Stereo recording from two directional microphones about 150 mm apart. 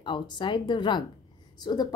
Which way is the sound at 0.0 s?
30° left (ahead or behind).